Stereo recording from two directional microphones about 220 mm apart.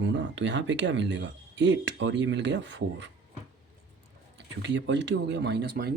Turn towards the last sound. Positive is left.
turn(degrees=-45)  # may be behind; listen again after turning